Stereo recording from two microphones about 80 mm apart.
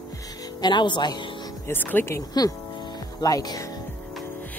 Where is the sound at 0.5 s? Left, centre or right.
Left.